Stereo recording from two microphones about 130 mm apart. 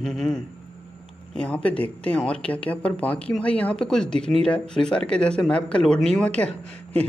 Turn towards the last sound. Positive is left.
turn(degrees=10)  # may be behind; listen again after turning